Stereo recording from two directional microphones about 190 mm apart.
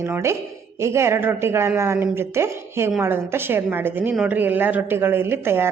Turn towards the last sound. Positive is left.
turn(degrees=-10)  # may be behind; listen again after turning